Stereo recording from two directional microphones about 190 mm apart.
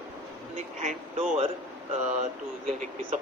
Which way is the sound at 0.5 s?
40° right (ahead or behind).